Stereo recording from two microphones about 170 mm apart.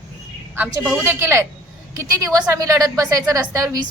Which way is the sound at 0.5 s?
5° right (ahead or behind).